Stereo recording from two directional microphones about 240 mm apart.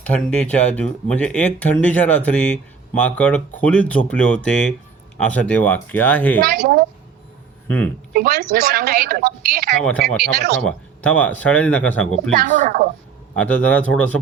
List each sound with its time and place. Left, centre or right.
0.0 s speech: centre
6.4 s a woman's voice: right
7.7 s speech: centre
8.1 s a woman's voice: right
9.8 s speech: centre
10.3 s a woman's voice: right
10.6 s speech: centre
12.4 s a woman's voice: right
13.3 s speech: centre